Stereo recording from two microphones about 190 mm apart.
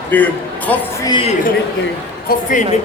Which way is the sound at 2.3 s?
45° left (ahead or behind).